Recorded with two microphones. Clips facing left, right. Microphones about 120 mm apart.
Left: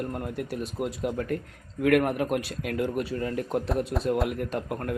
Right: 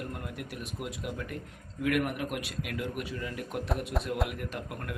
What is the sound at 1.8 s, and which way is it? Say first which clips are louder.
Speech: left 7 dB; 45° left (ahead or behind).